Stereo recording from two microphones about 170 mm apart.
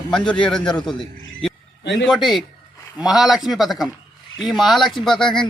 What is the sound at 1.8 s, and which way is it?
Speech, 90° left.